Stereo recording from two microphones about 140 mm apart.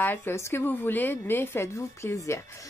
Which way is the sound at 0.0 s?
15° left (ahead or behind).